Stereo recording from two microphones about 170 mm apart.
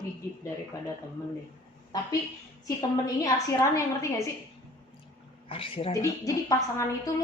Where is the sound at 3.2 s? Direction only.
20° left (ahead or behind).